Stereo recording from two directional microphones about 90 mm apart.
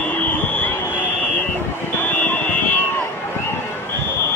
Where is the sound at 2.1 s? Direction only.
20° left (ahead or behind).